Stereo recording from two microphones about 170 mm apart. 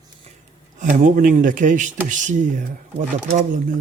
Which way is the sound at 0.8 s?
45° right (ahead or behind).